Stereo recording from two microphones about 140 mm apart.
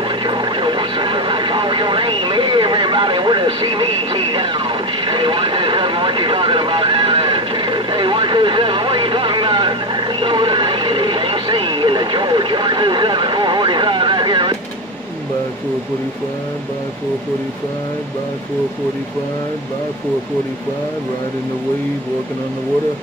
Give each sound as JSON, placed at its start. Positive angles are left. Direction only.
{"t": 0.2, "sound": "vehicle", "side_deg": -35}